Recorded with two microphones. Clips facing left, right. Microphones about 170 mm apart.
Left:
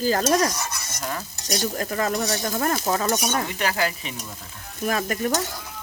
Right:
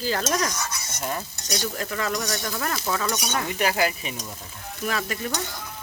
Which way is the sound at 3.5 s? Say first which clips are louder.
Right 1 dB; 15° right (ahead or behind).